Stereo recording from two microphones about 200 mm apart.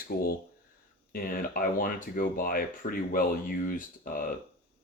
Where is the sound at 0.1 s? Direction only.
50° left (ahead or behind).